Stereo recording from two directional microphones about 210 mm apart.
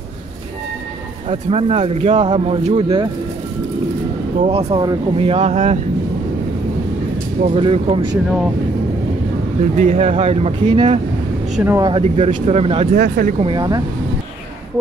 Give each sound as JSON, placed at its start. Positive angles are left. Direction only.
{"t": 1.3, "sound": "speech", "side_deg": -30}
{"t": 4.4, "sound": "speech", "side_deg": -30}
{"t": 7.5, "sound": "speech", "side_deg": -25}
{"t": 9.8, "sound": "speech", "side_deg": -35}
{"t": 11.5, "sound": "speech", "side_deg": -10}
{"t": 11.8, "sound": "speech", "side_deg": -25}
{"t": 12.9, "sound": "speech", "side_deg": -45}
{"t": 13.4, "sound": "speech", "side_deg": -20}